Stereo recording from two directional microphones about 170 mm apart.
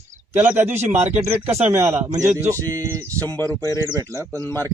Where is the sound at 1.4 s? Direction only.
15° right (ahead or behind).